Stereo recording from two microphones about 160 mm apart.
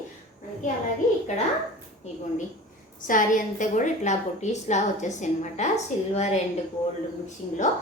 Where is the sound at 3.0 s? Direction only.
55° left (ahead or behind).